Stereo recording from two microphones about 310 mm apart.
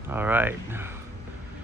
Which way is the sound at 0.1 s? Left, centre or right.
Centre.